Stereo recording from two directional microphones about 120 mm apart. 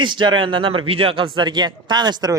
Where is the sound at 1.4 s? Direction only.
35° right (ahead or behind).